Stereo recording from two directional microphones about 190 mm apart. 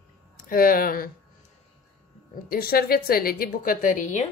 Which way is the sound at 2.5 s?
50° left (ahead or behind).